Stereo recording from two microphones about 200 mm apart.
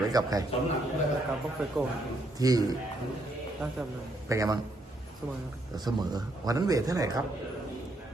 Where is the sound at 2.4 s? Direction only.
20° right (ahead or behind).